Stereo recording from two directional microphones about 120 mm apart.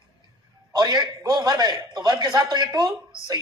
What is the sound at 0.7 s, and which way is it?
A man's voice, 35° right (ahead or behind).